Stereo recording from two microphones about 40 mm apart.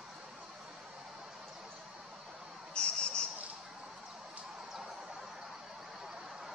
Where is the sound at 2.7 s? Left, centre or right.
Left.